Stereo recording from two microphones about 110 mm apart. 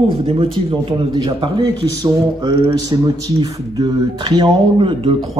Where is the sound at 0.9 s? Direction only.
45° right (ahead or behind).